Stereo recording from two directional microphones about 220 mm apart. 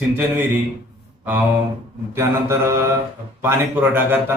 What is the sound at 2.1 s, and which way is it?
Speech, 10° right (ahead or behind).